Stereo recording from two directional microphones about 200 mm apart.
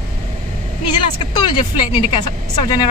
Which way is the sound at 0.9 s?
25° left (ahead or behind).